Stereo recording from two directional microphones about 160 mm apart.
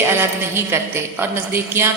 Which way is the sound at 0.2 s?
15° right (ahead or behind).